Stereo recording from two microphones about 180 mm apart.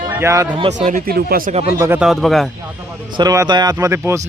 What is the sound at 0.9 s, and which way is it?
Speech, 50° right (ahead or behind).